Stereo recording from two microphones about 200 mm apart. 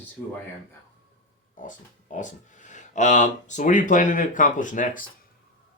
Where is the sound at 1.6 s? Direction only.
40° left (ahead or behind).